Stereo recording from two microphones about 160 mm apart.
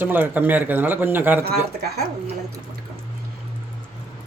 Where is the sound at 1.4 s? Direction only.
80° right.